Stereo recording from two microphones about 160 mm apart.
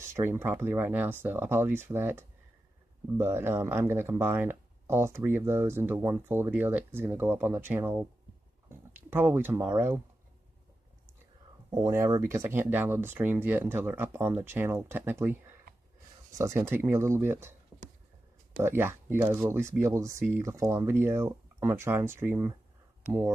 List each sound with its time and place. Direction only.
0.1 s speech: 15° right (ahead or behind)
11.7 s speech: 20° right (ahead or behind)
18.6 s speech: 15° right (ahead or behind)